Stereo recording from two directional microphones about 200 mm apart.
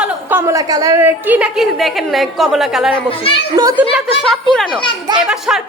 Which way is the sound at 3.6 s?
15° right (ahead or behind).